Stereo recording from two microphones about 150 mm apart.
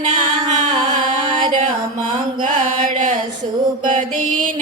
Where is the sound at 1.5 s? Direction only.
50° right (ahead or behind).